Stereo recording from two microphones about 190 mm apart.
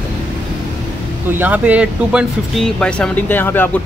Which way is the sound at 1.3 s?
10° right (ahead or behind).